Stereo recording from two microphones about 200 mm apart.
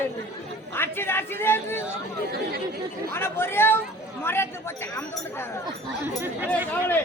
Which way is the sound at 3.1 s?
10° left (ahead or behind).